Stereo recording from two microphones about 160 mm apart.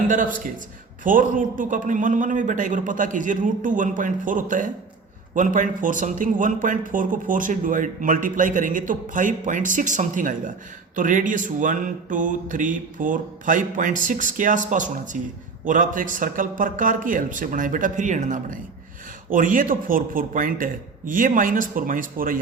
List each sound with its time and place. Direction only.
0.1 s a man's voice: 55° right (ahead or behind)